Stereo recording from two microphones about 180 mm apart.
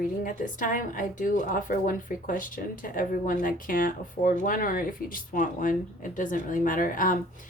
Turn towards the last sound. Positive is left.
turn(degrees=50)  # may be behind; listen again after turning